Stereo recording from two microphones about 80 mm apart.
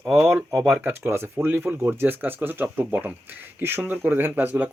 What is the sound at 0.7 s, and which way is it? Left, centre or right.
Speech, right.